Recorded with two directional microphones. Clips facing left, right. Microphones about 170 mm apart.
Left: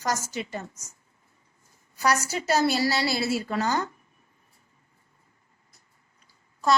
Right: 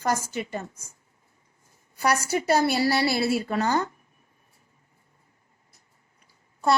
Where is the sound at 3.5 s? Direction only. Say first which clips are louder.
Right 2 dB; 20° right (ahead or behind).